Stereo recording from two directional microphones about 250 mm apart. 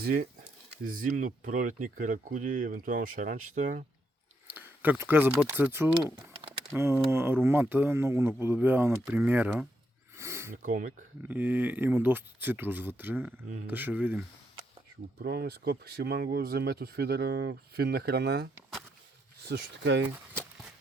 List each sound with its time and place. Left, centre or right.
0.0 s speech: right
4.4 s speech: centre
10.2 s a sound: centre
10.6 s speech: right
11.2 s speech: centre
15.2 s speech: right